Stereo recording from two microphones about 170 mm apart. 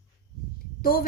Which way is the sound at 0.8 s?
60° left (ahead or behind).